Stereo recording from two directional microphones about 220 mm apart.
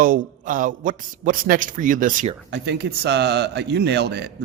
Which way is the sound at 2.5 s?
50° right (ahead or behind).